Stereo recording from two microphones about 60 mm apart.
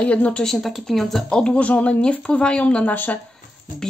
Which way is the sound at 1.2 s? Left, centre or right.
Centre.